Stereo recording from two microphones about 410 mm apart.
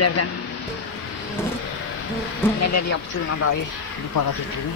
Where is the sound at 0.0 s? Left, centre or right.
Left.